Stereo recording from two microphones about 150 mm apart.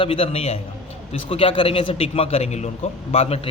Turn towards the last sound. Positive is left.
turn(degrees=40)  # may be behind; listen again after turning